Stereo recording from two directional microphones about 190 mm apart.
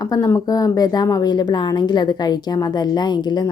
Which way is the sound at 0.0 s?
20° left (ahead or behind).